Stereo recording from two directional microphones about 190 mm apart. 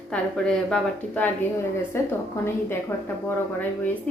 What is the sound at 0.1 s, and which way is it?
A woman's voice, 5° left (ahead or behind).